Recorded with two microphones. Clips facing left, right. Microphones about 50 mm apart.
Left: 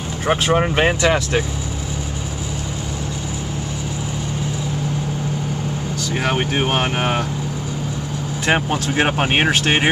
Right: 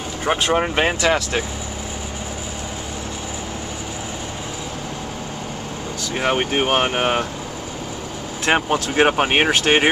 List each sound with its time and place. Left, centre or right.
0.2 s speech: centre
6.2 s speech: centre
8.5 s speech: centre